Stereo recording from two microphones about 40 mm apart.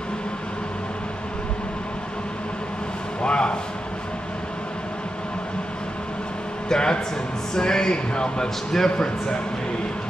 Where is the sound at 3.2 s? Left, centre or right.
Left.